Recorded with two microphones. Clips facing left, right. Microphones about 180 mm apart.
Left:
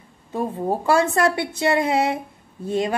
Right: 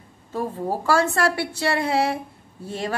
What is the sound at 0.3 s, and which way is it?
Speech, 20° left (ahead or behind).